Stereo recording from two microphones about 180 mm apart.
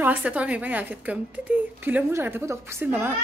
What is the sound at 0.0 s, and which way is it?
A woman's voice, 10° right (ahead or behind).